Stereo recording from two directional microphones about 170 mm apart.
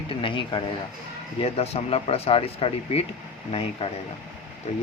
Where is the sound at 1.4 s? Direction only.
35° left (ahead or behind).